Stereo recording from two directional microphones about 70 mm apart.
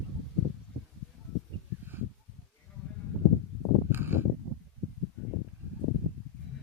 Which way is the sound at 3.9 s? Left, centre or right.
Right.